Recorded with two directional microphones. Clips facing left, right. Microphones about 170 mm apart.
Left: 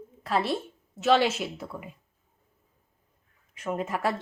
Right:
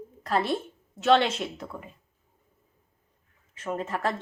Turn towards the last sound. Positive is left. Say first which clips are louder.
# left 1 dB
turn(degrees=10)  # may be behind; listen again after turning